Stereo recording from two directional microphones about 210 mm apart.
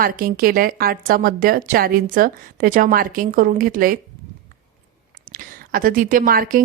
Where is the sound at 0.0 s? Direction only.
40° right (ahead or behind).